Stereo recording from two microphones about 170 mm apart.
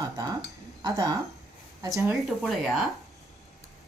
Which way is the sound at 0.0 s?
20° right (ahead or behind).